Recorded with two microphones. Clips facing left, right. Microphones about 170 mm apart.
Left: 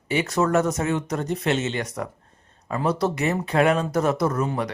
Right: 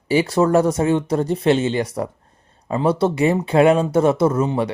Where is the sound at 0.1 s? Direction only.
30° right (ahead or behind).